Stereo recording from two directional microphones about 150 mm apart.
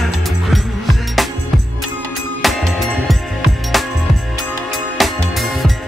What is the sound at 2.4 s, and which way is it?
Music, centre (ahead or behind).